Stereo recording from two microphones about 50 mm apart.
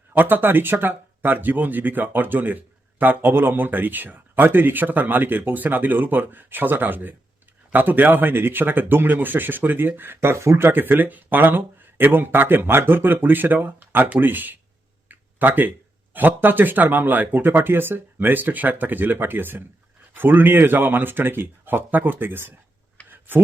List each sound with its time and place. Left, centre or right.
0.1 s speech: right
10.3 s speech: right
10.7 s speech: right
15.1 s a sound: right
16.1 s speech: right
23.0 s a sound: right